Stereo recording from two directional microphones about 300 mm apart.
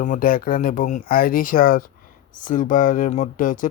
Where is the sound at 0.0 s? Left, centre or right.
Left.